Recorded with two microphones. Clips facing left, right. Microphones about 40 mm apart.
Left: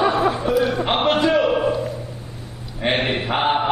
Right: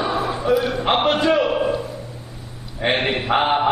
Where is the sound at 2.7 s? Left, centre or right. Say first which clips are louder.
Right 1 dB; centre.